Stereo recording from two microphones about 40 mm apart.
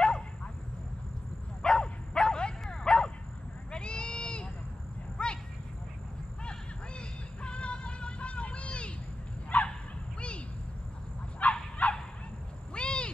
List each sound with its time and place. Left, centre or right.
1.6 s dog: centre
2.7 s bow-wow: centre
3.7 s a sound: left
7.4 s music: left
9.5 s fowl: left
11.4 s bow-wow: left
11.8 s fowl: left
12.7 s owl: left